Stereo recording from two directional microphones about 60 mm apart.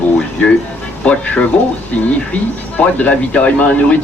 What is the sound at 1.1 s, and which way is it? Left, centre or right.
Speech, left.